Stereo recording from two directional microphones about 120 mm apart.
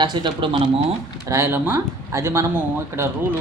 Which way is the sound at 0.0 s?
40° right (ahead or behind).